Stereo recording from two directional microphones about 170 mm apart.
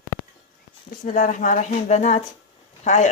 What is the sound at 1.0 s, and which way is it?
Speech, 50° left (ahead or behind).